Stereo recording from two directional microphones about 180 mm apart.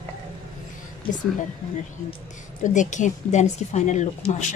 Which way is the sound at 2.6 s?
45° left (ahead or behind).